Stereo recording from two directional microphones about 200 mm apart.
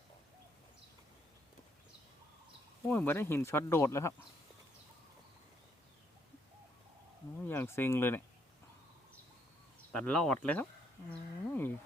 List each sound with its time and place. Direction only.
2.8 s speech: 10° left (ahead or behind)
7.4 s speech: 10° left (ahead or behind)
9.9 s speech: 5° left (ahead or behind)
11.4 s livestock: 10° left (ahead or behind)